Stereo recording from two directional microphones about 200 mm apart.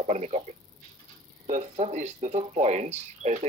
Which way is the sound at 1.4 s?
35° right (ahead or behind).